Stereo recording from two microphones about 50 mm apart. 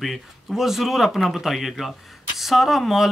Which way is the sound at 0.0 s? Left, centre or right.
Centre.